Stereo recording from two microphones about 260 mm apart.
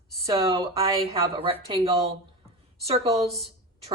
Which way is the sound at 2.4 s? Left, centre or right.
Right.